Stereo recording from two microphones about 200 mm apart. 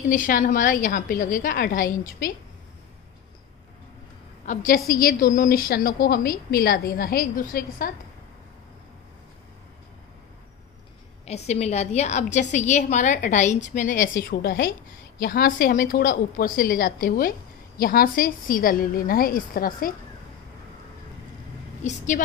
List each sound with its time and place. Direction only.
0.1 s a woman's voice: 40° left (ahead or behind)
4.5 s a woman's voice: 45° left (ahead or behind)
11.2 s a woman's voice: 30° left (ahead or behind)
21.8 s a woman's voice: 40° left (ahead or behind)